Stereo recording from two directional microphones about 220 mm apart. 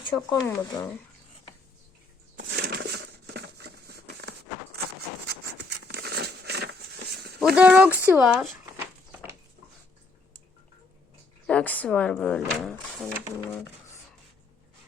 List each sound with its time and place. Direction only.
0.0 s speech: 20° left (ahead or behind)
2.4 s a sound: 50° right (ahead or behind)
7.3 s speech: 5° right (ahead or behind)
11.4 s speech: 5° left (ahead or behind)